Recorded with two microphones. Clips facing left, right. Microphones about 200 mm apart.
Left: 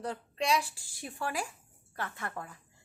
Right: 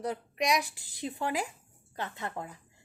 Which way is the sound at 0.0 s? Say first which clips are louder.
Right 2 dB; 15° right (ahead or behind).